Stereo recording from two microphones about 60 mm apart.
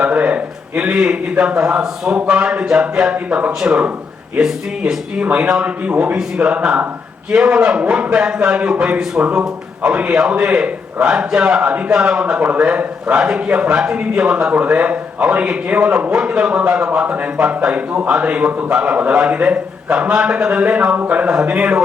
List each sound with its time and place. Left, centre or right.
0.0 s a sound: right
1.5 s a man's voice: centre
5.2 s a man's voice: right
6.1 s a man's voice: centre